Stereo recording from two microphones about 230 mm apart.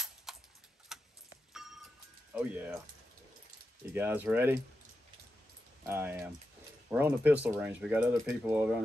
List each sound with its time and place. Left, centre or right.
0.3 s tick-tock: centre
0.9 s a sound: centre
2.3 s speech: centre
3.9 s speech: centre
5.9 s speech: centre